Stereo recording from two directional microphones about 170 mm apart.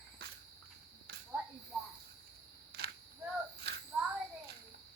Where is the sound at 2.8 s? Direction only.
65° right (ahead or behind).